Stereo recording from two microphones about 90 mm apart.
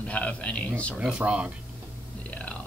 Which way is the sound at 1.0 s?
10° right (ahead or behind).